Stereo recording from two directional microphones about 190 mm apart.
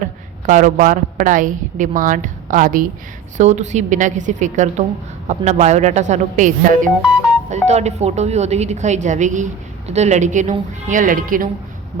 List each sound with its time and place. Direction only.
0.4 s a woman's voice: 40° right (ahead or behind)